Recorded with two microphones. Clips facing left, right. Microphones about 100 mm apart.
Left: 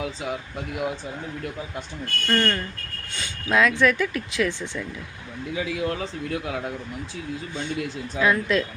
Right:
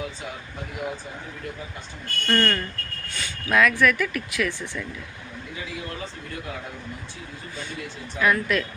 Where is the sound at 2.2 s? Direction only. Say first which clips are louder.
Even; 10° left (ahead or behind).